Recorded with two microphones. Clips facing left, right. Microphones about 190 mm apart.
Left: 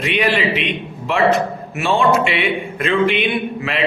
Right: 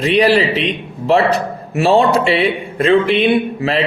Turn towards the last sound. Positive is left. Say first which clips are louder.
# right 6 dB
turn(degrees=-35)  # may be behind; listen again after turning